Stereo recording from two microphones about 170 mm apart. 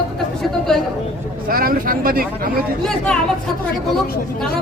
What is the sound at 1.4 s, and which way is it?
Speech, 60° right (ahead or behind).